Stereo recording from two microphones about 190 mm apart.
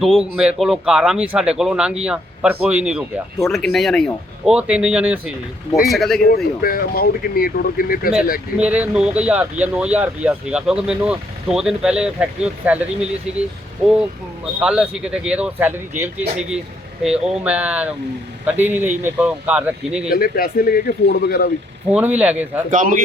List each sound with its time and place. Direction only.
0.0 s speech: centre (ahead or behind)
6.1 s speech: 55° left (ahead or behind)
8.5 s speech: 5° right (ahead or behind)
14.6 s speech: 5° right (ahead or behind)
20.1 s speech: 50° left (ahead or behind)
21.9 s speech: 10° right (ahead or behind)
22.7 s speech: 45° right (ahead or behind)